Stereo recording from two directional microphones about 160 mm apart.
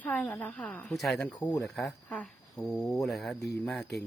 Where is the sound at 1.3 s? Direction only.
20° left (ahead or behind).